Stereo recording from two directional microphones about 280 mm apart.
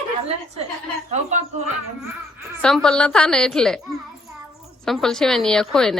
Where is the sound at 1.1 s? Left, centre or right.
Right.